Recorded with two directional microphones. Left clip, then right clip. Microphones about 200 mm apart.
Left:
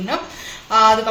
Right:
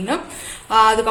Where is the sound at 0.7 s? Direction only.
65° right (ahead or behind).